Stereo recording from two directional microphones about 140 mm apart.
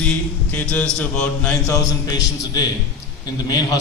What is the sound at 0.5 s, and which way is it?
Mantra, 10° left (ahead or behind).